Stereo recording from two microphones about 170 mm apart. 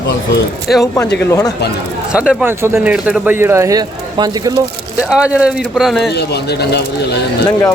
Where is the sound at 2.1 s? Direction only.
5° right (ahead or behind); by 4.6 s 20° right (ahead or behind).